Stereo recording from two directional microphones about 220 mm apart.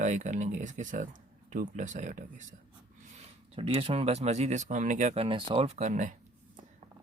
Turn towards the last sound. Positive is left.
turn(degrees=-35)  # may be behind; listen again after turning